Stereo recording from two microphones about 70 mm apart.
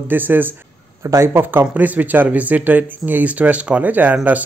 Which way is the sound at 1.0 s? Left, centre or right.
Right.